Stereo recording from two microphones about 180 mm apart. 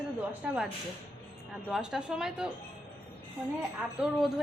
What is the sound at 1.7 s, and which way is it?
Speech, 5° right (ahead or behind).